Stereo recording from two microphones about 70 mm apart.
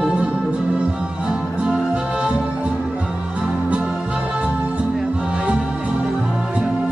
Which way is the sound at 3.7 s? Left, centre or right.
Centre.